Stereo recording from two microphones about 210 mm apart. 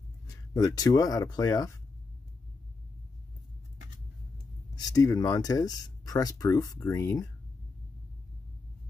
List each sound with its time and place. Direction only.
0.3 s speech: 20° left (ahead or behind)
4.7 s speech: 15° left (ahead or behind)